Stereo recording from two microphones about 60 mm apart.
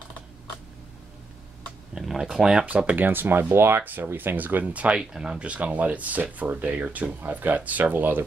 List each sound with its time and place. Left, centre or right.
2.0 s speech: centre
3.0 s speech: right